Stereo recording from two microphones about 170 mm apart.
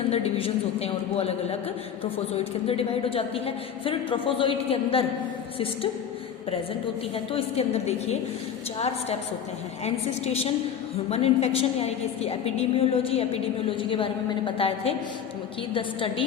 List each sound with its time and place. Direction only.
0.1 s a woman's voice: 35° left (ahead or behind)
7.3 s a woman's voice: 35° left (ahead or behind)
9.8 s a woman's voice: 40° left (ahead or behind)